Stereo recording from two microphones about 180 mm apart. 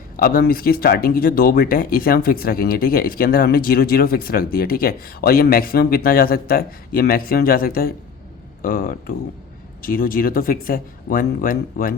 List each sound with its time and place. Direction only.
0.2 s speech: 55° left (ahead or behind)